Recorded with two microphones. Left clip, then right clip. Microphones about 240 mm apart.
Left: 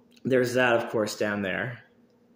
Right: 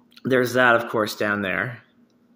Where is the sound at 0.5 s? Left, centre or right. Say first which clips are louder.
Right 5 dB; centre.